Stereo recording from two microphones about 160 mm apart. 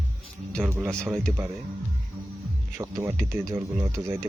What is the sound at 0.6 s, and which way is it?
Speech, 10° right (ahead or behind).